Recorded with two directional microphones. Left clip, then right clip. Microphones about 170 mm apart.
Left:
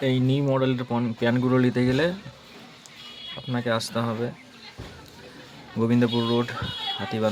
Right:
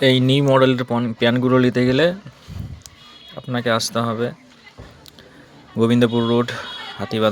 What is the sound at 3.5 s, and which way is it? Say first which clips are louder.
Speech: right 7 dB; 15° right (ahead or behind).